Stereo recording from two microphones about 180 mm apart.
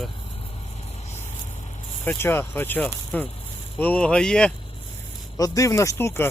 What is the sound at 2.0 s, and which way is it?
Speech, 10° left (ahead or behind).